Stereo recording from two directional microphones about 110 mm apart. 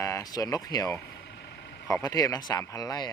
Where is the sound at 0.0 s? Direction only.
30° left (ahead or behind).